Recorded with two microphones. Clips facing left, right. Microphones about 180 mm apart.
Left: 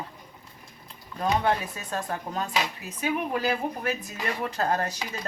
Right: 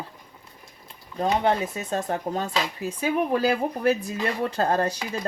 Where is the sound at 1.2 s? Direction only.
25° right (ahead or behind).